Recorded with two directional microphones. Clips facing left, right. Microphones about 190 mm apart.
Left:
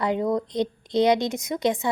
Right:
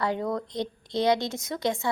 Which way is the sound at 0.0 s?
20° left (ahead or behind).